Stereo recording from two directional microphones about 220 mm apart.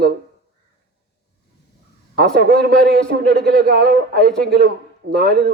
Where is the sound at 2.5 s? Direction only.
40° right (ahead or behind).